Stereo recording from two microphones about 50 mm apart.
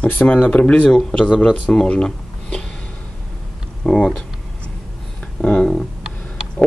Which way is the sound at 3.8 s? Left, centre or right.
Centre.